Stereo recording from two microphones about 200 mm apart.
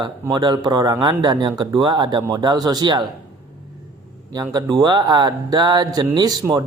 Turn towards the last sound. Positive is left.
turn(degrees=-20)  # may be behind; listen again after turning